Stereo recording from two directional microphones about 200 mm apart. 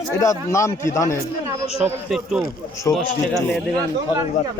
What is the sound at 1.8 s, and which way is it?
A man's voice, centre (ahead or behind).